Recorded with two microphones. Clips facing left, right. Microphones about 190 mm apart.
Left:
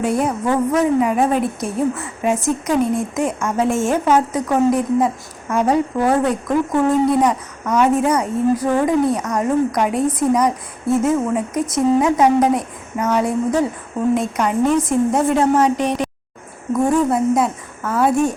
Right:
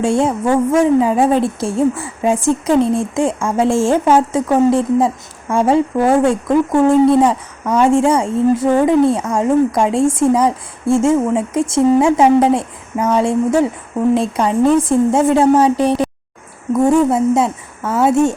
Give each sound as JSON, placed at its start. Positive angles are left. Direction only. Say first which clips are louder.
{"t": 0.0, "sound": "a woman's voice", "louder": "right 4 dB", "side_deg": -25}
{"t": 17.1, "sound": "a woman's voice", "louder": "right 3 dB", "side_deg": -25}